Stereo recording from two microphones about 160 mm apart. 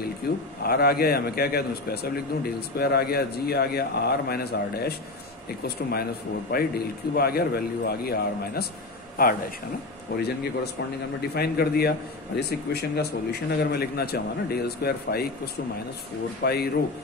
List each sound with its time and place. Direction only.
0.2 s a man's voice: 75° left (ahead or behind)
7.2 s a man's voice: 75° left (ahead or behind)
9.2 s speech: 65° left (ahead or behind)
10.1 s a man's voice: 75° left (ahead or behind)
11.3 s a man's voice: 75° left (ahead or behind)
12.4 s speech: 90° left
16.4 s a man's voice: 90° left